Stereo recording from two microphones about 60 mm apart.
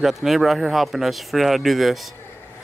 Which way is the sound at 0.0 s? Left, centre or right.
Centre.